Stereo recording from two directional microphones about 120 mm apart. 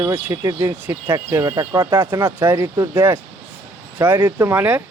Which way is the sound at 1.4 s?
35° right (ahead or behind).